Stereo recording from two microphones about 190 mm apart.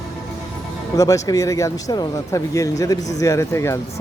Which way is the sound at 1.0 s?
15° left (ahead or behind).